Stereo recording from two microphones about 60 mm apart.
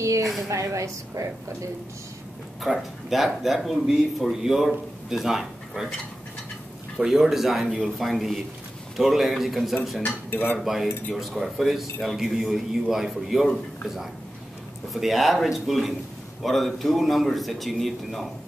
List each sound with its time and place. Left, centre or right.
0.0 s a sound: right
0.5 s a woman's voice: right
2.6 s speech: centre
7.0 s speech: centre
15.0 s speech: centre